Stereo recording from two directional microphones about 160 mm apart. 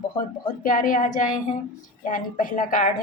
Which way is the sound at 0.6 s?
55° left (ahead or behind).